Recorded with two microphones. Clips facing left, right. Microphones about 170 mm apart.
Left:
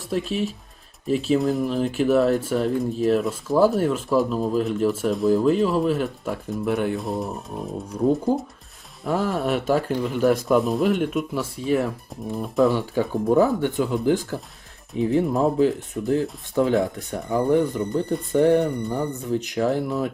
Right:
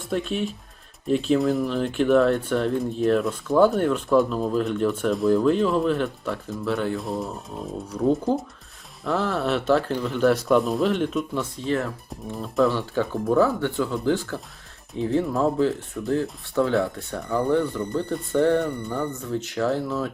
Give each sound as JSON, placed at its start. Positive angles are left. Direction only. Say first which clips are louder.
{"t": 0.1, "sound": "speech", "louder": "left 1 dB", "side_deg": 0}
{"t": 7.0, "sound": "speech", "louder": "left 2 dB", "side_deg": 0}